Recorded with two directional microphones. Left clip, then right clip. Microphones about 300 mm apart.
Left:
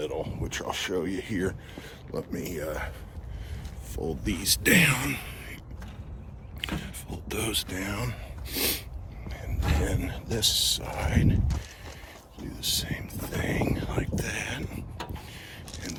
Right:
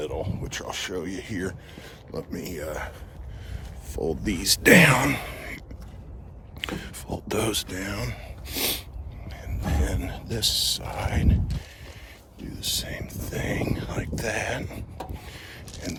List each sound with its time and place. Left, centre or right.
0.0 s speech: centre
3.9 s speech: centre
6.6 s speech: centre
12.5 s speech: centre
15.3 s a sound: centre